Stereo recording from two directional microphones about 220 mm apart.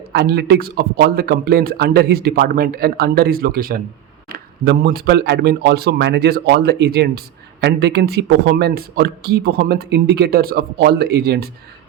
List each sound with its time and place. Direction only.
0.1 s speech: 45° right (ahead or behind)